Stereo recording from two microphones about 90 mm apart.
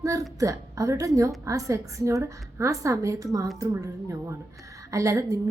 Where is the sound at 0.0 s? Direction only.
40° right (ahead or behind).